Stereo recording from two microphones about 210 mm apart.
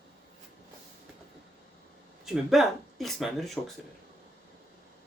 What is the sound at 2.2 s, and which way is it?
Speech, centre (ahead or behind).